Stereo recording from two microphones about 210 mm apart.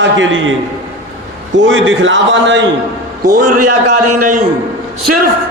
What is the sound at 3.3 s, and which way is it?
A man's voice, 40° right (ahead or behind).